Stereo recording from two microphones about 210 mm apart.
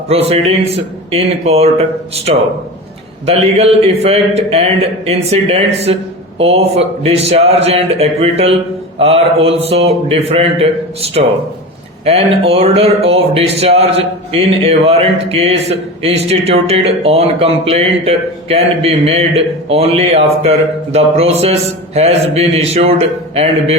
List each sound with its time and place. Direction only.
0.1 s speech: 30° right (ahead or behind)